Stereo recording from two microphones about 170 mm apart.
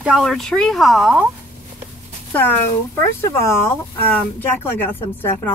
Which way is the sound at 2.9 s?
15° left (ahead or behind).